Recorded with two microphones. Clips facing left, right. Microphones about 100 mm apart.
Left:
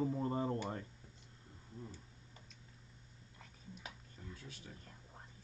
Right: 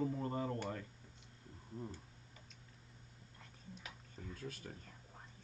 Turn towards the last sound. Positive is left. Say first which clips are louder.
# right 5 dB
turn(degrees=-50)  # may be behind; listen again after turning